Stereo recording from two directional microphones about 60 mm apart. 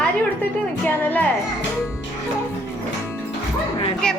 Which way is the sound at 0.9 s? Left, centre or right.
Left.